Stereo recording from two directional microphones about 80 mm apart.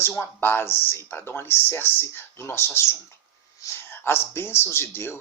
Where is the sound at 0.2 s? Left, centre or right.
Left.